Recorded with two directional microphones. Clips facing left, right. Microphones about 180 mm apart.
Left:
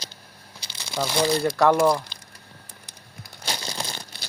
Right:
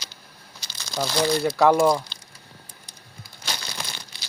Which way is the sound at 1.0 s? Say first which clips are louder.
Even; centre (ahead or behind).